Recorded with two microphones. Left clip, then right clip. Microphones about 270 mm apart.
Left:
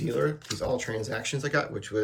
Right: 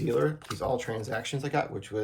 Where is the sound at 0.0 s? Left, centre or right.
Centre.